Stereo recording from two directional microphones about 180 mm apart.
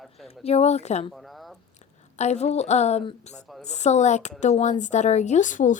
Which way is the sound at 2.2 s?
40° left (ahead or behind).